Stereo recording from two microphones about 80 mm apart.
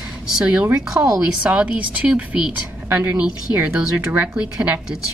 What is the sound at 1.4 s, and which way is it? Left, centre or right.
A woman's voice, centre.